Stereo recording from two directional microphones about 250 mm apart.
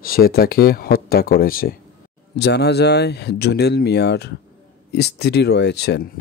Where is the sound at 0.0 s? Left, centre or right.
Left.